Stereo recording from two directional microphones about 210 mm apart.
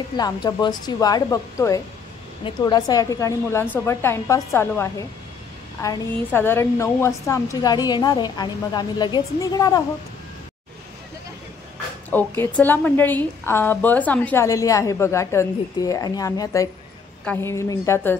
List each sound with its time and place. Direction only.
0.2 s a woman's voice: 20° left (ahead or behind)
12.1 s a woman's voice: 10° left (ahead or behind)